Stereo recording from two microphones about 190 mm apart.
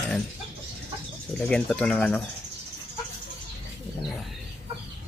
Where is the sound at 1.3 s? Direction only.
5° left (ahead or behind).